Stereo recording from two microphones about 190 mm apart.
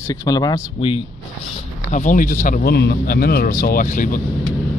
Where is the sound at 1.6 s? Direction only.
40° left (ahead or behind).